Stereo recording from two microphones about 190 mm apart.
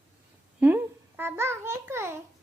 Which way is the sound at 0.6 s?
10° right (ahead or behind).